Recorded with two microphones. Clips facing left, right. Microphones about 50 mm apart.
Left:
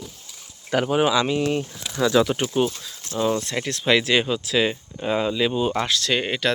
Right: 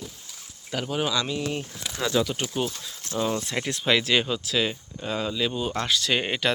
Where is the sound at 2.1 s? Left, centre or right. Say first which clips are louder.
Left 5 dB; left.